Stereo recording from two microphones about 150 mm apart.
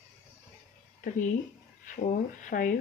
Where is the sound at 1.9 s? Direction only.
55° left (ahead or behind).